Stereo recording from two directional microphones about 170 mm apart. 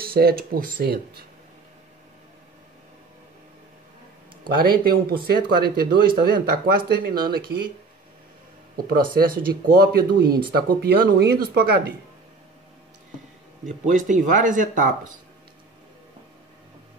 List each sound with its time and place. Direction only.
0.0 s speech: 65° right (ahead or behind)
4.6 s speech: 60° right (ahead or behind)
8.7 s speech: 60° right (ahead or behind)
13.8 s speech: 50° right (ahead or behind)